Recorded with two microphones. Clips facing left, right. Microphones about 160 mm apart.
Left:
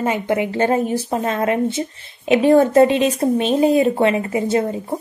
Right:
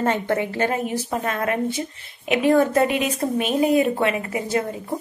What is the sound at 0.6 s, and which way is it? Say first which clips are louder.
A woman's voice: left 5 dB; 35° left (ahead or behind).